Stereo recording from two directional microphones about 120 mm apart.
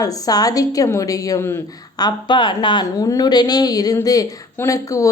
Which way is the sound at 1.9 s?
35° left (ahead or behind).